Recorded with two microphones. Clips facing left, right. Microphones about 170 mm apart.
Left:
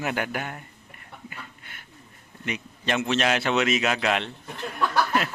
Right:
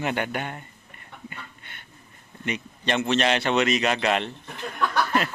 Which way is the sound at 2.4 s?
Centre (ahead or behind).